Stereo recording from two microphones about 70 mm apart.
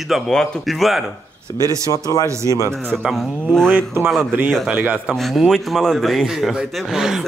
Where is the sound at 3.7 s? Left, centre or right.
Right.